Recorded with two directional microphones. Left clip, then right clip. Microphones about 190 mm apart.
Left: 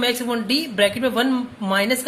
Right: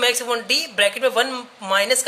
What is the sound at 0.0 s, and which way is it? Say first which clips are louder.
A woman's voice: right 2 dB; 20° right (ahead or behind).